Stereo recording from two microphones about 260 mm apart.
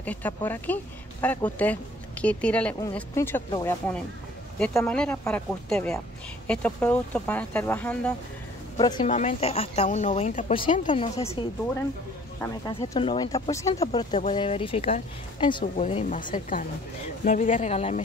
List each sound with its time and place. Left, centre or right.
0.0 s speech: centre
8.7 s speech: centre
12.4 s speech: centre
14.1 s speech: left